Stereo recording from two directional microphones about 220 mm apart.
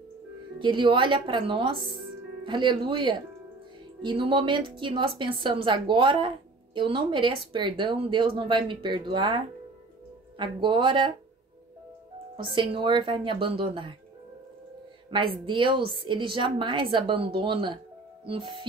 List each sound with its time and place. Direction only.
0.6 s a woman's voice: 20° right (ahead or behind)
12.4 s a woman's voice: 20° right (ahead or behind)
15.4 s a woman's voice: 20° right (ahead or behind)